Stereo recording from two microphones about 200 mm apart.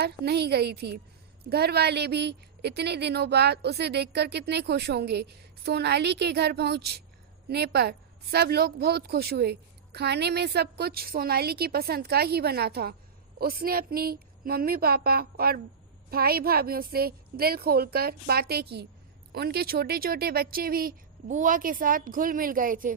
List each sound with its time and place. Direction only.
0.0 s a woman's voice: 55° right (ahead or behind)